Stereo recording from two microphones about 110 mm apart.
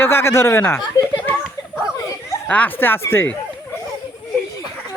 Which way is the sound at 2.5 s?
15° left (ahead or behind).